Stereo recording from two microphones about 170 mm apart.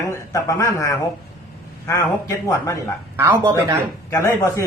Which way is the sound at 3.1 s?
15° right (ahead or behind).